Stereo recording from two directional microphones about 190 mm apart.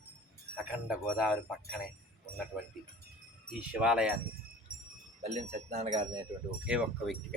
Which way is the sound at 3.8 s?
5° right (ahead or behind).